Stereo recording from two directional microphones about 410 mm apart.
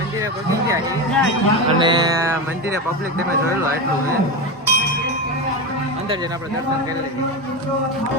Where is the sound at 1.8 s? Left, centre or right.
Centre.